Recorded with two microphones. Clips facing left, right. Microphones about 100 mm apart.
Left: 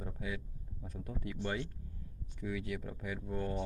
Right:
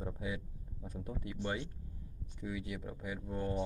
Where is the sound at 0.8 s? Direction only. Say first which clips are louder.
Even; 20° right (ahead or behind).